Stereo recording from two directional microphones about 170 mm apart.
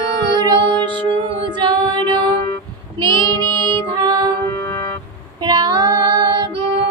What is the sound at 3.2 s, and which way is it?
Child singing, 15° left (ahead or behind).